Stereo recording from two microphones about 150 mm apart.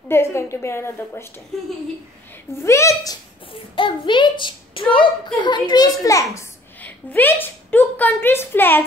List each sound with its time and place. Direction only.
0.1 s a woman's voice: 15° left (ahead or behind)
2.6 s a woman's voice: 20° left (ahead or behind)
3.7 s a woman's voice: 35° left (ahead or behind)
6.3 s a woman's voice: 10° left (ahead or behind)